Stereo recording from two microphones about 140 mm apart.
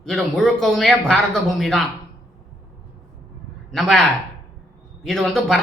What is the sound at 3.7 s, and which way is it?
A man's voice, centre (ahead or behind).